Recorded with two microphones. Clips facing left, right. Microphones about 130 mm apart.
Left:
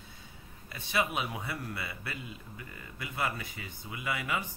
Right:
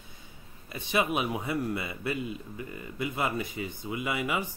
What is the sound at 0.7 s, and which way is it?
A man's voice, 20° right (ahead or behind).